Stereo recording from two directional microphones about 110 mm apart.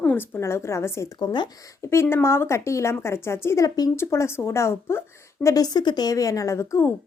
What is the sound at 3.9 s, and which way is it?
A woman's voice, 25° left (ahead or behind).